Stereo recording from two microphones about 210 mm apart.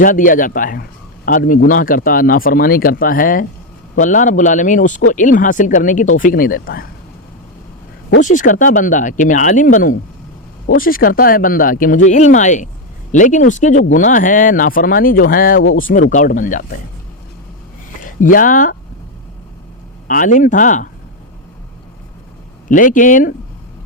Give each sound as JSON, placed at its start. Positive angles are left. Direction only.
{"t": 0.0, "sound": "a man's voice", "side_deg": 40}
{"t": 8.2, "sound": "a man's voice", "side_deg": 40}
{"t": 18.2, "sound": "speech", "side_deg": 40}
{"t": 20.1, "sound": "speech", "side_deg": 40}
{"t": 22.7, "sound": "speech", "side_deg": 40}